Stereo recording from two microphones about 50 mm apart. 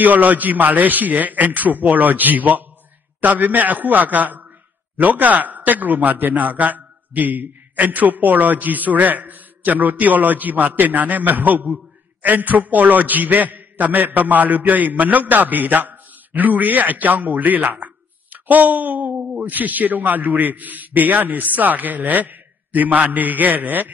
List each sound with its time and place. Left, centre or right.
0.0 s a man's voice: right